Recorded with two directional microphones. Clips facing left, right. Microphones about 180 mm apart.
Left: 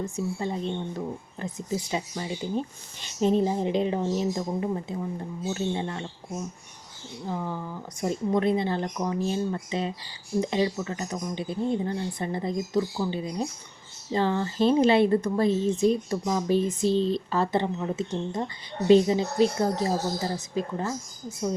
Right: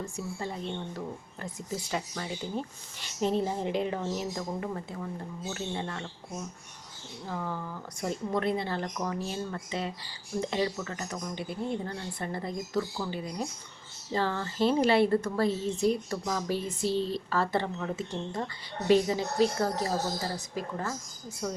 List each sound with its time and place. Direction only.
0.0 s speech: 20° left (ahead or behind)
7.3 s speech: 15° left (ahead or behind)